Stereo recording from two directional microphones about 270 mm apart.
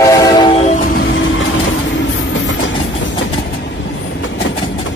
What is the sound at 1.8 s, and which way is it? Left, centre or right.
Train, left.